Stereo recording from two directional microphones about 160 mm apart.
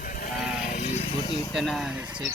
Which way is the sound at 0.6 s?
50° left (ahead or behind).